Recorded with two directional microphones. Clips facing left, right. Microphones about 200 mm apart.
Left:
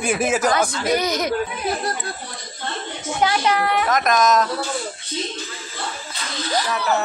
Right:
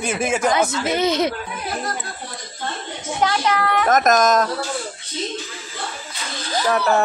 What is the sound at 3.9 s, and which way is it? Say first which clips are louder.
Speech: right 4 dB; 45° right (ahead or behind).